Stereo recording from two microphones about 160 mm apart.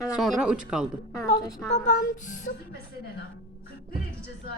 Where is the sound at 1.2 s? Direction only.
45° left (ahead or behind).